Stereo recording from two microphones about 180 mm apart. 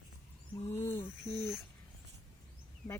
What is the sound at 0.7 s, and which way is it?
Cricket, 15° left (ahead or behind).